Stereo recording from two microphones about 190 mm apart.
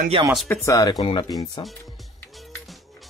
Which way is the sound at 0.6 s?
20° left (ahead or behind).